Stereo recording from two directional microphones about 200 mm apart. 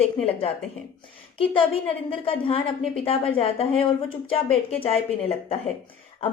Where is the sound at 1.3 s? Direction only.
25° left (ahead or behind).